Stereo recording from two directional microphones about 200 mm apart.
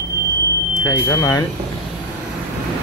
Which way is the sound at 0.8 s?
15° left (ahead or behind).